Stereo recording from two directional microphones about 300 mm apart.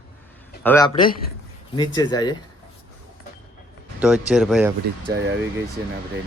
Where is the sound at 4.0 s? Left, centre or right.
Centre.